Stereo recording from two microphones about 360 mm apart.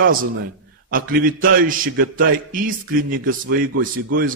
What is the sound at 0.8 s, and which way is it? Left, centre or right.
A man's voice, right.